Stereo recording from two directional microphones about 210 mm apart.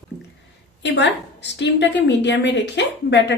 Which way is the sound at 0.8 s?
55° left (ahead or behind).